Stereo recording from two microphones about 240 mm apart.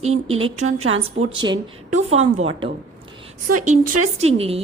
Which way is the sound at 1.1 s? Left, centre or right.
Centre.